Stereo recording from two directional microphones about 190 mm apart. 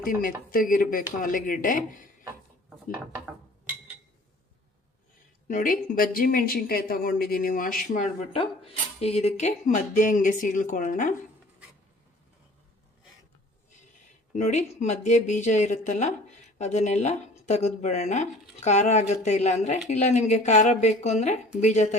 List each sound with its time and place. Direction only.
0.0 s speech: 45° left (ahead or behind)
5.5 s speech: 45° left (ahead or behind)
14.3 s speech: 35° left (ahead or behind)